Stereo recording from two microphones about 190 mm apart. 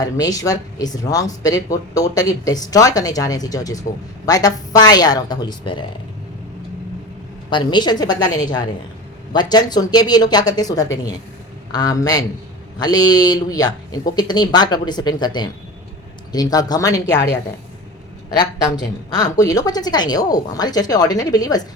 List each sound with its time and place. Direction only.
0.0 s speech: 20° left (ahead or behind)
7.5 s speech: 25° left (ahead or behind)
18.3 s speech: 20° left (ahead or behind)